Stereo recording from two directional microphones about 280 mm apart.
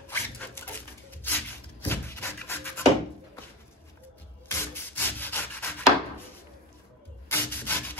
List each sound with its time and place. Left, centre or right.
0.1 s a sound: centre
4.5 s rub: centre
7.2 s rub: centre